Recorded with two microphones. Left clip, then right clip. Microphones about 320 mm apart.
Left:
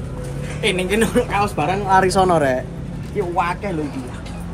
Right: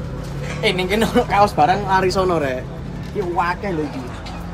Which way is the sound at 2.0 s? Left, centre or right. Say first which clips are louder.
Left 2 dB; left.